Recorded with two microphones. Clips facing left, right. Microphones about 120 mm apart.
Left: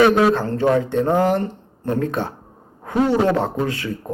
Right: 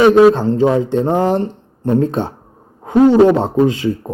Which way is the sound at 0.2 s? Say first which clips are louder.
Right 8 dB; 20° right (ahead or behind).